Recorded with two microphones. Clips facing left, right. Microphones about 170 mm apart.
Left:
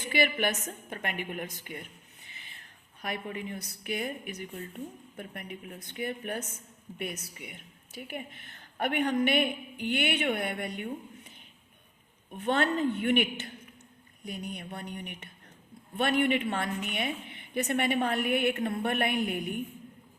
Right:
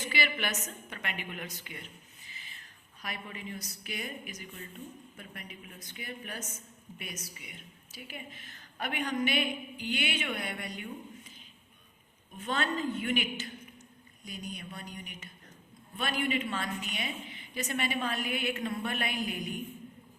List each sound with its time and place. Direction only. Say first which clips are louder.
0.1 s a woman's voice: left 7 dB; 50° left (ahead or behind)